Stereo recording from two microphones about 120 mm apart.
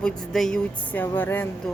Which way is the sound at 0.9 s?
15° left (ahead or behind).